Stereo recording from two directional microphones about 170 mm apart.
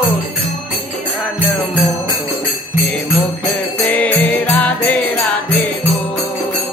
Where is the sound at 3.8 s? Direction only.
10° left (ahead or behind).